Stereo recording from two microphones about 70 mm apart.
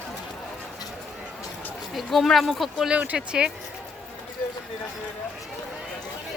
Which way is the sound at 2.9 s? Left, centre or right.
Centre.